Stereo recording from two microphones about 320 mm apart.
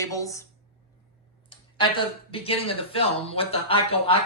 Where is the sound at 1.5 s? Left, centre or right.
Centre.